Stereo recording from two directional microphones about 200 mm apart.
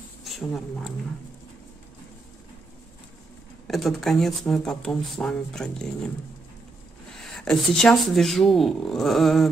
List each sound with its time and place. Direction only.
0.2 s speech: centre (ahead or behind)
3.6 s speech: centre (ahead or behind)
7.2 s speech: centre (ahead or behind)